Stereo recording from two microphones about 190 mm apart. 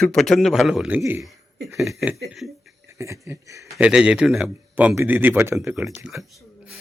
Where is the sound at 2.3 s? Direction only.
Centre (ahead or behind).